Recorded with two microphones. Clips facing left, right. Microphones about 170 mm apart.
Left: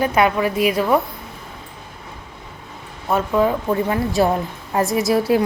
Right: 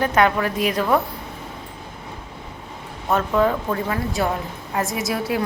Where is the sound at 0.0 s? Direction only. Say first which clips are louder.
Left 1 dB; 10° left (ahead or behind).